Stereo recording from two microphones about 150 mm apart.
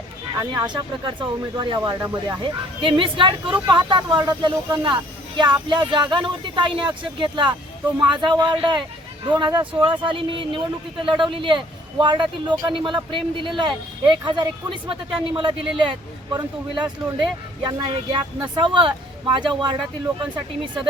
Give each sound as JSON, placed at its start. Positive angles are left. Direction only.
{"t": 0.3, "sound": "speech", "side_deg": -30}